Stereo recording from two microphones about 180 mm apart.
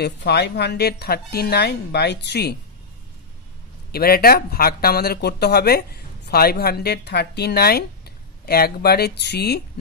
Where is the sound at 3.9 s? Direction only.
60° left (ahead or behind).